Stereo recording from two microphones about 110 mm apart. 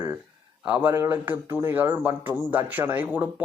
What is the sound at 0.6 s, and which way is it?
A man's voice, 15° right (ahead or behind).